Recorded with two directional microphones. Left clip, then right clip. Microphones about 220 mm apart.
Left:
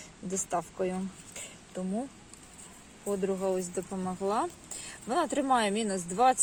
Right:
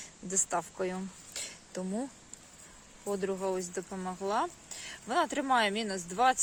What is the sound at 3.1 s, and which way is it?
Speech, 25° right (ahead or behind).